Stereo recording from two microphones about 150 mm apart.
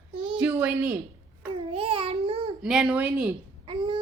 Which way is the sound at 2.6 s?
5° right (ahead or behind).